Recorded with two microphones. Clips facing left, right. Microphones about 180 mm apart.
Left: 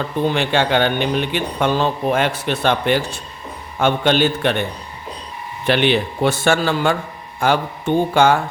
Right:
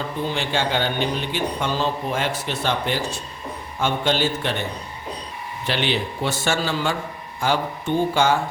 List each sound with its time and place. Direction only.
0.3 s a man's voice: 65° left (ahead or behind)
5.6 s a man's voice: 60° left (ahead or behind)